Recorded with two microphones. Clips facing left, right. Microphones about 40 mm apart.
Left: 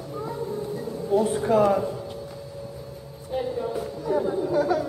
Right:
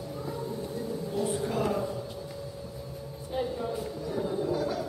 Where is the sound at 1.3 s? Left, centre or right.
Left.